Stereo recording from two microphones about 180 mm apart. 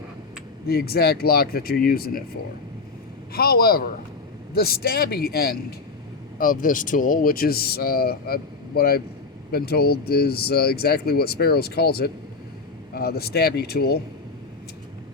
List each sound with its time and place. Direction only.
0.7 s speech: 60° left (ahead or behind)
3.3 s speech: 60° left (ahead or behind)